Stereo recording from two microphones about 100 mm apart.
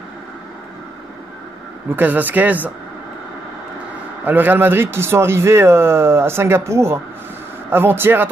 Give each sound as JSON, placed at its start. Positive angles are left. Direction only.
{"t": 1.9, "sound": "speech", "side_deg": -20}
{"t": 4.2, "sound": "speech", "side_deg": -20}